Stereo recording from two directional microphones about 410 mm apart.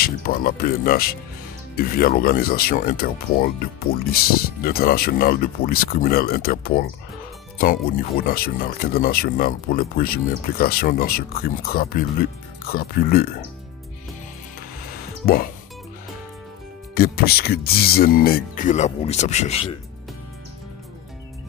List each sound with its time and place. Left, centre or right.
0.0 s speech: left
15.2 s speech: left
16.9 s speech: left